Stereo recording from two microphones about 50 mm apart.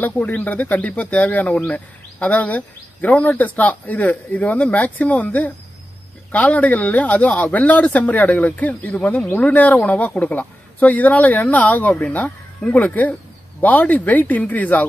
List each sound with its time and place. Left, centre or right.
0.0 s speech: left